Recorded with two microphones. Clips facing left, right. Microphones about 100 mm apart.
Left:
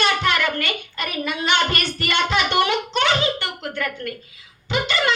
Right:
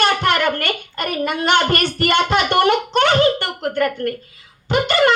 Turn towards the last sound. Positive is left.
turn(degrees=-50)  # may be behind; listen again after turning